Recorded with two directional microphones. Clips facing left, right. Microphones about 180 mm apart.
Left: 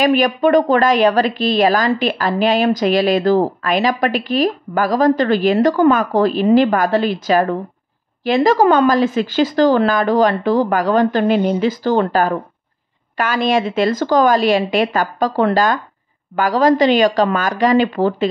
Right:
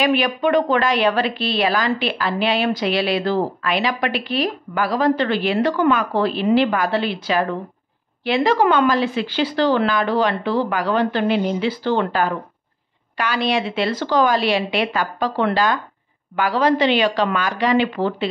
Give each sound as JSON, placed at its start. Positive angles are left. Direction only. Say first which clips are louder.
{"t": 0.0, "sound": "a woman's voice", "louder": "left 4 dB", "side_deg": 45}